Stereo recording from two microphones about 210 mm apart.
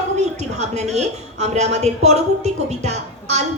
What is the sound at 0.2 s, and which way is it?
A woman's voice, 35° right (ahead or behind).